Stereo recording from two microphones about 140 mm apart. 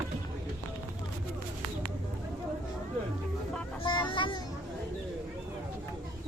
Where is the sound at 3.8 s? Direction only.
35° left (ahead or behind).